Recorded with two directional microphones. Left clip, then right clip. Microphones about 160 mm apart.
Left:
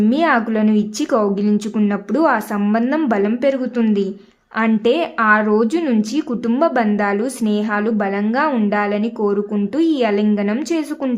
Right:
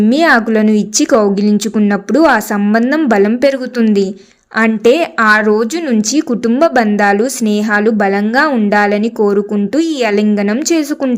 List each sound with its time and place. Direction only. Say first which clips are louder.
0.0 s speech: right 6 dB; 25° right (ahead or behind)